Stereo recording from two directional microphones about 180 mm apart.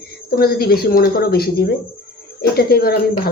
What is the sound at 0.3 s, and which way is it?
Speech, 60° left (ahead or behind).